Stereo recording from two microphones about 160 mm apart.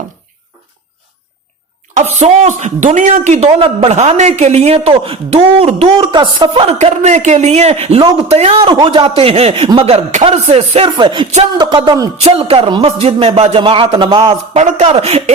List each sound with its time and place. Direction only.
1.9 s speech: 45° right (ahead or behind)
6.7 s speech: 45° right (ahead or behind)
8.5 s speech: 30° right (ahead or behind)
10.9 s a woman's voice: 30° right (ahead or behind)
14.5 s speech: 45° right (ahead or behind)